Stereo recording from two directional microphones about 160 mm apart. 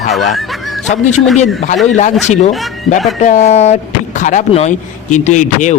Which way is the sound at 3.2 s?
50° left (ahead or behind).